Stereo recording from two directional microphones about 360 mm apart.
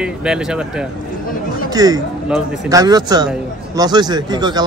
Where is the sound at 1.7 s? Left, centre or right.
Centre.